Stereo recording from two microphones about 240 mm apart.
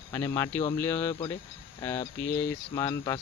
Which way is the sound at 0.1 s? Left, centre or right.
Centre.